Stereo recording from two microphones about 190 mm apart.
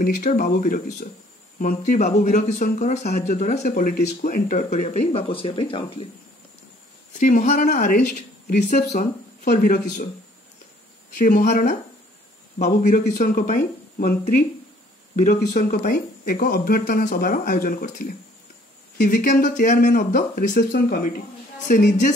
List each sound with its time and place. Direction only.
0.0 s speech: 45° left (ahead or behind); by 6.0 s 25° left (ahead or behind)
7.2 s speech: 40° left (ahead or behind)
11.1 s speech: 45° left (ahead or behind)